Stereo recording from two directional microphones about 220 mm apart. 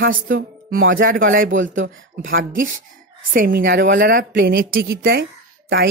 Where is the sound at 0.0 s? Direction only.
40° right (ahead or behind).